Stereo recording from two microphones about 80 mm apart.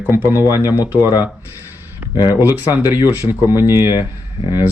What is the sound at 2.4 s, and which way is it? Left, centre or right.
Speech, right.